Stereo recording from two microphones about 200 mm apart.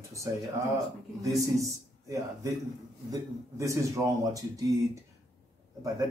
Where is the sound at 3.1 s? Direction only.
15° right (ahead or behind).